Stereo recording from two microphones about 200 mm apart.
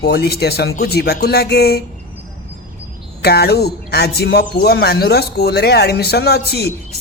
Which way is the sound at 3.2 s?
55° left (ahead or behind).